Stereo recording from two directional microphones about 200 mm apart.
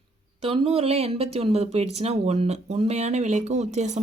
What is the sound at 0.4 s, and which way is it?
Speech, 30° right (ahead or behind).